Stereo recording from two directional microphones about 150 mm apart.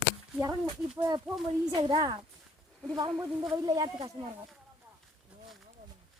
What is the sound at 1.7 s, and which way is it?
A woman's voice, 30° right (ahead or behind).